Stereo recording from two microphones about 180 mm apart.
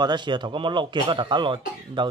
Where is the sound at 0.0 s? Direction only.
25° right (ahead or behind).